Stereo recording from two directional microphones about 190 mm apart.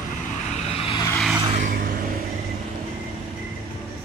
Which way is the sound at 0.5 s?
30° left (ahead or behind).